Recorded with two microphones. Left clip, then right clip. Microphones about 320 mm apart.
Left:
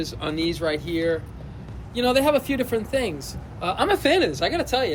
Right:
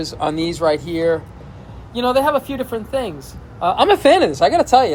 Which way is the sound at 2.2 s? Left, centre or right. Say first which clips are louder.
Right 3 dB; centre.